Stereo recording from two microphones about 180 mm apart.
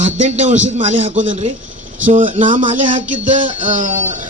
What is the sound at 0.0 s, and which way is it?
A man's voice, 40° right (ahead or behind).